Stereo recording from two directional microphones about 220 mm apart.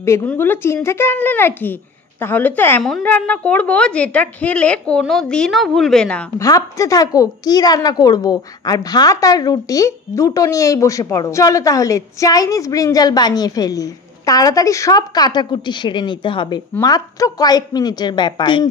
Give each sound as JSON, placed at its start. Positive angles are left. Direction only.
{"t": 0.0, "sound": "speech", "side_deg": 10}